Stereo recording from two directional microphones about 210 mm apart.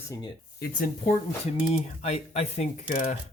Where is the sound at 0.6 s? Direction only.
45° left (ahead or behind).